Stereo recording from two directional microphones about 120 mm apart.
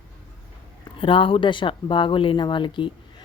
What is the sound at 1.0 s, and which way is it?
Speech, 45° left (ahead or behind).